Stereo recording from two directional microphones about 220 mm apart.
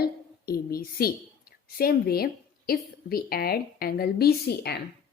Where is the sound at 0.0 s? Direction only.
45° left (ahead or behind).